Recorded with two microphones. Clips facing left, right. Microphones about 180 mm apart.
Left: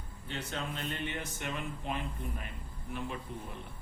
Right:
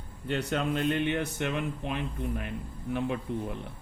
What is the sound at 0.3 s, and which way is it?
Speech, 70° right (ahead or behind).